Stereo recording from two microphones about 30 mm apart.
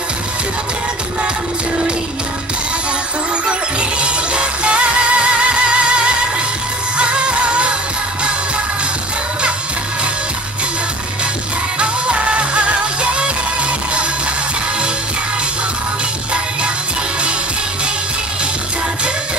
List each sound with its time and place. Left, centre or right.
4.0 s music: right
11.8 s music: right